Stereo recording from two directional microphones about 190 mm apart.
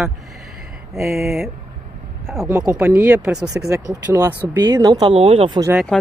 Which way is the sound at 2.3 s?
15° right (ahead or behind).